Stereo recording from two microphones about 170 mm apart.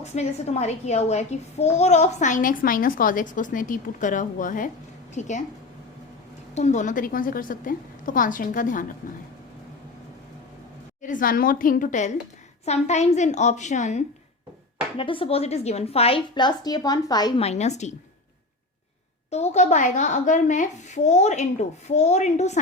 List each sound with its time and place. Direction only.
0.0 s a child's voice: 40° left (ahead or behind)
6.5 s a child's voice: 45° left (ahead or behind)
11.0 s a child's voice: 55° left (ahead or behind)
14.9 s a woman's voice: 30° left (ahead or behind)
17.4 s a woman's voice: 40° left (ahead or behind)
19.3 s a child's voice: 40° left (ahead or behind)